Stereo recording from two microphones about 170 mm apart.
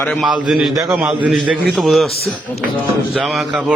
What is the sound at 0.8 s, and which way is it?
A man's voice, 5° right (ahead or behind).